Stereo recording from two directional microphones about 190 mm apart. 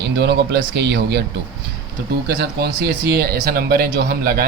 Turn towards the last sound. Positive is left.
turn(degrees=-55)  # may be behind; listen again after turning